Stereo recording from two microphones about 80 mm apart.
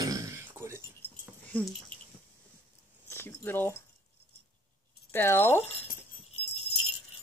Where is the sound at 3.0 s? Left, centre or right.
Left.